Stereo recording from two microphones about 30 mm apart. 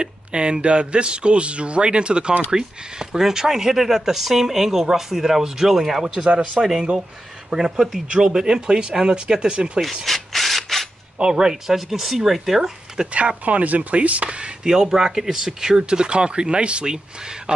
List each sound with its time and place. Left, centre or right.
0.0 s a man's voice: right
2.5 s speech: right
10.0 s rub: centre
11.3 s speech: centre
11.7 s speech: centre
13.0 s speech: centre
13.5 s speech: right
14.6 s speech: right
15.8 s a man's voice: right